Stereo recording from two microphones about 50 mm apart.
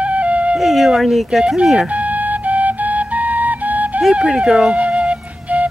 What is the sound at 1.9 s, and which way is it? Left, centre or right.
Flute, right.